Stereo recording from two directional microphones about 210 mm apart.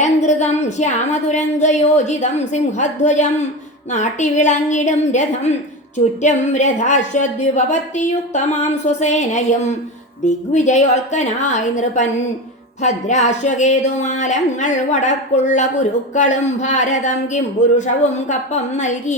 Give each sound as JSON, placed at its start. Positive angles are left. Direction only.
{"t": 0.0, "sound": "a woman's voice", "side_deg": 35}